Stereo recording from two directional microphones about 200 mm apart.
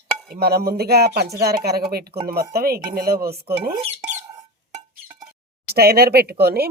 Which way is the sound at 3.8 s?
35° right (ahead or behind).